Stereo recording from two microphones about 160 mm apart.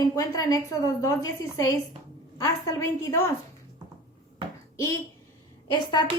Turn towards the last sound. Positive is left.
turn(degrees=25)  # may be behind; listen again after turning